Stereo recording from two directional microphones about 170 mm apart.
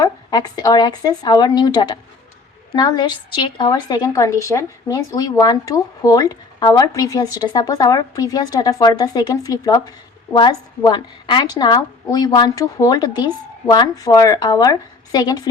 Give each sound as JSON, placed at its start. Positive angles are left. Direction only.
{"t": 0.0, "sound": "a woman's voice", "side_deg": 25}